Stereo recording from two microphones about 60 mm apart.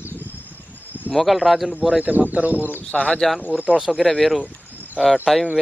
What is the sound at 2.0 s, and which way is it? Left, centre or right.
Speech, right.